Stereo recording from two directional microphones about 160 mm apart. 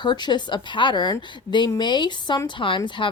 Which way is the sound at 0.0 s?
30° left (ahead or behind).